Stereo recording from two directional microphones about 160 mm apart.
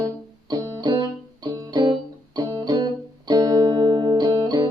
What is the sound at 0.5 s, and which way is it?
Music, 25° right (ahead or behind).